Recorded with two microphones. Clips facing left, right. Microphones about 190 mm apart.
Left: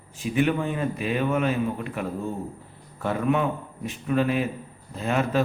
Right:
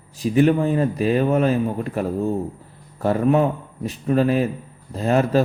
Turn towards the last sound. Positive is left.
turn(degrees=-40)  # may be behind; listen again after turning